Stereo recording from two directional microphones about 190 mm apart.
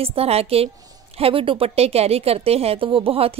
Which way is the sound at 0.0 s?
30° right (ahead or behind).